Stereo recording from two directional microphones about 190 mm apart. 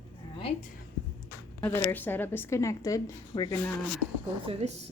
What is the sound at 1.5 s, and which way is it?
A woman's voice, 15° left (ahead or behind).